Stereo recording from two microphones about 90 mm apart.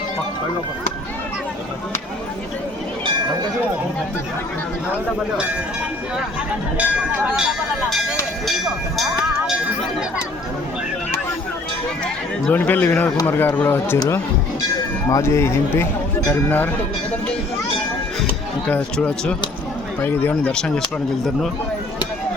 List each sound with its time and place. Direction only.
6.7 s speech: 15° right (ahead or behind)
8.4 s speech: centre (ahead or behind)
12.0 s speech: 15° left (ahead or behind)
15.1 s speech: 30° left (ahead or behind)
18.9 s speech: 10° left (ahead or behind)
20.0 s speech: 25° left (ahead or behind)
20.5 s speech: 10° left (ahead or behind)